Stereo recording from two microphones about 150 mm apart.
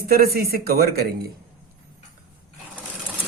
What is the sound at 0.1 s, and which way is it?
A man's voice, 90° right.